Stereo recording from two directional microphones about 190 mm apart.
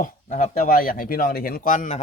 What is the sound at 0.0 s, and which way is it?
Speech, 40° left (ahead or behind).